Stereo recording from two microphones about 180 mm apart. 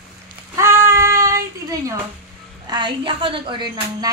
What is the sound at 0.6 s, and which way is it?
Child singing, 15° right (ahead or behind).